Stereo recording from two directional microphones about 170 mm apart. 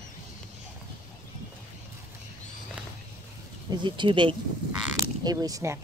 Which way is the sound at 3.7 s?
25° right (ahead or behind).